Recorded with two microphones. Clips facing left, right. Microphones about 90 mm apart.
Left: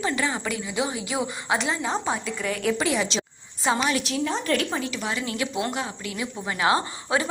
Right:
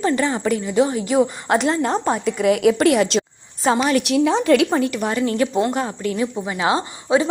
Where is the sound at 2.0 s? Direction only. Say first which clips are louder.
Right 9 dB; 65° right (ahead or behind).